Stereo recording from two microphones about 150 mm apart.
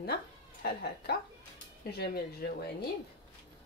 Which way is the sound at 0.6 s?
90° left.